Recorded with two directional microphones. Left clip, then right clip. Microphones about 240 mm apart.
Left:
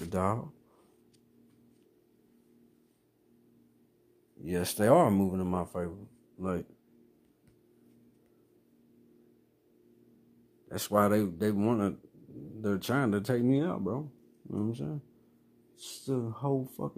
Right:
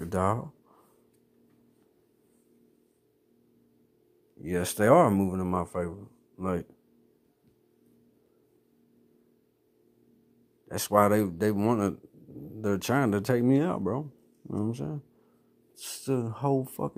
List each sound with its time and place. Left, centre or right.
0.0 s speech: centre
4.4 s a man's voice: centre
10.7 s speech: right